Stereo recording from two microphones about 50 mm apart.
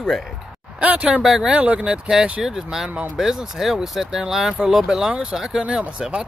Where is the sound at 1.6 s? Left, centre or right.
Right.